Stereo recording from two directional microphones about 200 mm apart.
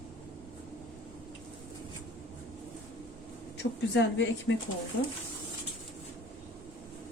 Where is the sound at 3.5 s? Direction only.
65° left (ahead or behind).